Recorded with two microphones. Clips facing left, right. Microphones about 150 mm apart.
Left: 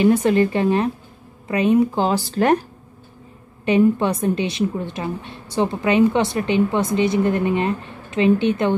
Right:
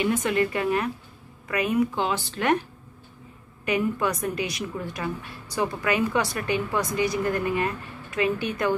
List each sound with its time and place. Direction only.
0.0 s speech: 35° left (ahead or behind)
3.6 s a woman's voice: 30° left (ahead or behind)